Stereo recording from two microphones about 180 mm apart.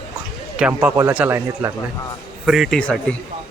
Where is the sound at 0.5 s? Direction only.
5° right (ahead or behind).